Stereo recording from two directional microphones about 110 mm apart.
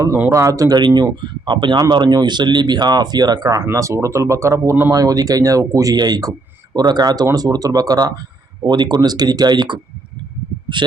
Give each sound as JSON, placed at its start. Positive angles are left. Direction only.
{"t": 0.3, "sound": "speech", "side_deg": -30}